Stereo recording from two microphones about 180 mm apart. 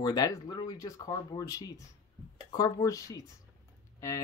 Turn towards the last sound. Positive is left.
turn(degrees=15)  # may be behind; listen again after turning